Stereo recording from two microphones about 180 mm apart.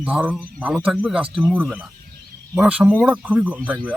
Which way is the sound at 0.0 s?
5° right (ahead or behind).